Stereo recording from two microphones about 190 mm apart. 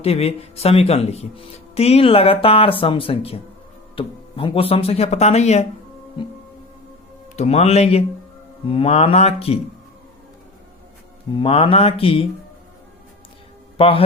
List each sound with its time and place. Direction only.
0.0 s speech: 30° left (ahead or behind)
7.3 s speech: 35° left (ahead or behind)
11.3 s speech: 30° left (ahead or behind)
13.7 s a man's voice: 30° left (ahead or behind)